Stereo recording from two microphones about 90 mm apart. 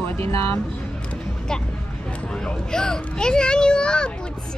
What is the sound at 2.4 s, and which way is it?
Speech, 10° left (ahead or behind).